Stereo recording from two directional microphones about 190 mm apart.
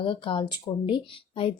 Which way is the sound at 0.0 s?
25° left (ahead or behind).